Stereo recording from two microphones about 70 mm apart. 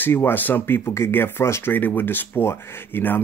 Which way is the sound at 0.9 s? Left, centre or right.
Left.